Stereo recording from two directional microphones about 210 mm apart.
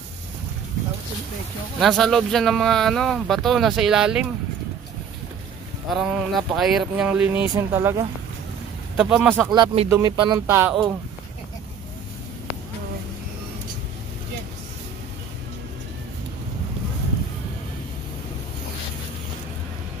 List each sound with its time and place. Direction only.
1.8 s speech: centre (ahead or behind)
5.9 s speech: centre (ahead or behind)
9.5 s speech: 20° right (ahead or behind)